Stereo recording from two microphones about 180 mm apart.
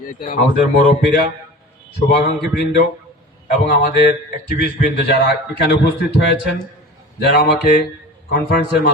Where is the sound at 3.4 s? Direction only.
65° left (ahead or behind).